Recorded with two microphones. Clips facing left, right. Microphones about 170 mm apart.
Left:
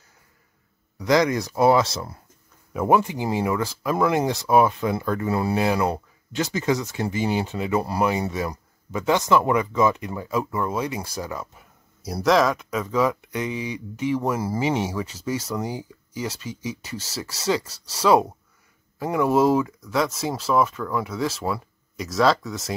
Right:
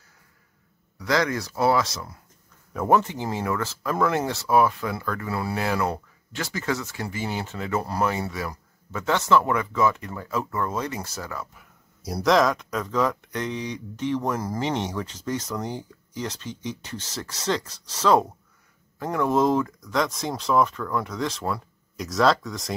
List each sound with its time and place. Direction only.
0.9 s speech: 20° left (ahead or behind)
2.7 s speech: 10° left (ahead or behind)
12.0 s speech: centre (ahead or behind)